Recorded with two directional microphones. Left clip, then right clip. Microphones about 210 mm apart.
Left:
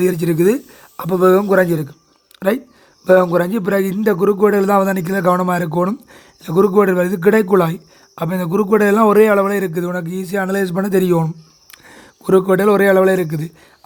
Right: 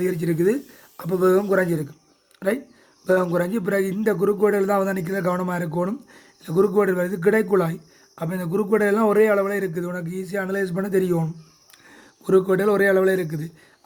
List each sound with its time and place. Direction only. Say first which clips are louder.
0.0 s a man's voice: left 7 dB; 30° left (ahead or behind)